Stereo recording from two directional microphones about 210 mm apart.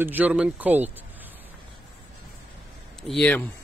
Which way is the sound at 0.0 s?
10° right (ahead or behind).